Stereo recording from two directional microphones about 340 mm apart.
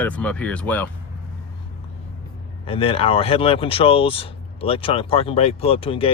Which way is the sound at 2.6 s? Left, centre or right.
Centre.